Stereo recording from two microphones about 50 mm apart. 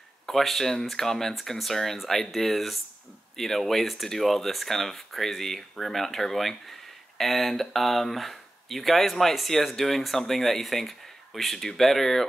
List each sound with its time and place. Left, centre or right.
0.3 s speech: centre